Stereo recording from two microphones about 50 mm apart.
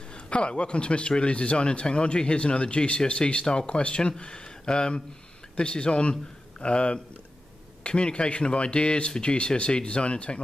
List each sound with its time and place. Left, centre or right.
0.1 s speech: left